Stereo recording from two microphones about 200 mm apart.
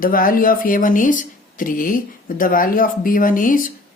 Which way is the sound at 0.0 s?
45° left (ahead or behind).